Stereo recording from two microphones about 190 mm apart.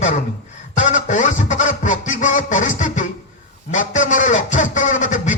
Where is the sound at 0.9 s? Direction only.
40° left (ahead or behind).